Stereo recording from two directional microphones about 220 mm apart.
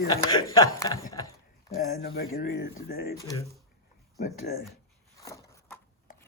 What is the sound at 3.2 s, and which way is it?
Speech, 15° left (ahead or behind).